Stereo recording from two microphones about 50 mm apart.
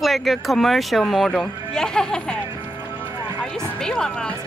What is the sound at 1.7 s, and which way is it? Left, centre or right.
Music, centre.